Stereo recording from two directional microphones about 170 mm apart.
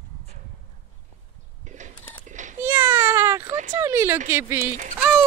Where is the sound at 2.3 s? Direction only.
45° right (ahead or behind).